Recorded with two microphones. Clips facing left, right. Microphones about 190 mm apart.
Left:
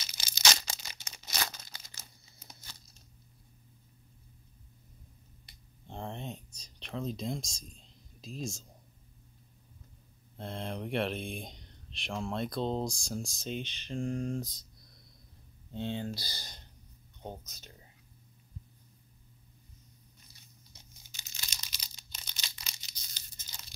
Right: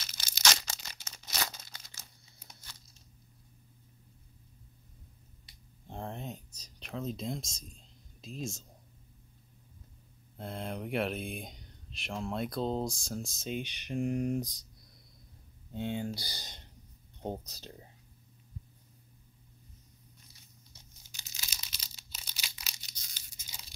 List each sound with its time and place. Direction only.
0.0 s tearing: 10° left (ahead or behind)
5.9 s a sound: 5° right (ahead or behind)
6.8 s speech: centre (ahead or behind)
10.3 s speech: 5° right (ahead or behind)
15.7 s speech: 10° right (ahead or behind)
17.2 s speech: 30° right (ahead or behind)
21.3 s a sound: 5° right (ahead or behind)